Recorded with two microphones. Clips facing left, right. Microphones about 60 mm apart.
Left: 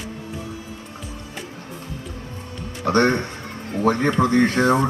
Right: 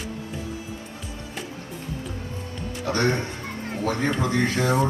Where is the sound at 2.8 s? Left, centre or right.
Left.